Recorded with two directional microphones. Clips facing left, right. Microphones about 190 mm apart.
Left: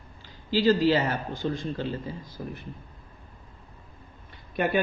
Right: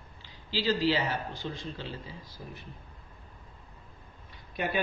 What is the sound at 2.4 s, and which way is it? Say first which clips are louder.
Speech: left 9 dB; 65° left (ahead or behind).